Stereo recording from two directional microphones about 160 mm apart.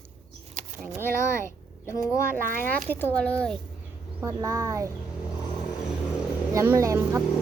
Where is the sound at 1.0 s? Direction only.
15° left (ahead or behind).